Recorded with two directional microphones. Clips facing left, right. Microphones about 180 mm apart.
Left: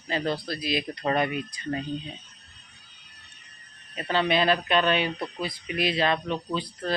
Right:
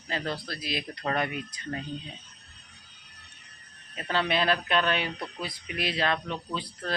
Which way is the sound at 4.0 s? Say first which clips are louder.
Left 3 dB; 15° left (ahead or behind).